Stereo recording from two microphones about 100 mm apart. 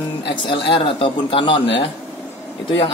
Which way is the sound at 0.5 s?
60° left (ahead or behind).